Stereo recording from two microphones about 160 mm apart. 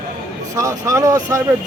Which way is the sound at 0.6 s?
20° right (ahead or behind).